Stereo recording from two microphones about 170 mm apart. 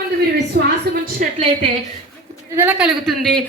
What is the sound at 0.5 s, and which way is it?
Speech, 60° right (ahead or behind).